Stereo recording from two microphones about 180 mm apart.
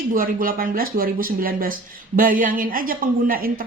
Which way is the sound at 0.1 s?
50° right (ahead or behind).